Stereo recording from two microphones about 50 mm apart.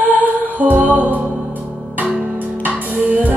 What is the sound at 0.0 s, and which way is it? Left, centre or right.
Music, right.